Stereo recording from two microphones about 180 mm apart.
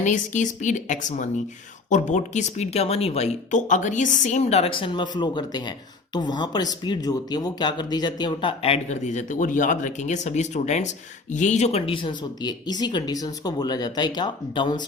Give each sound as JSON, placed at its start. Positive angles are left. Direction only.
{"t": 0.0, "sound": "speech", "side_deg": 45}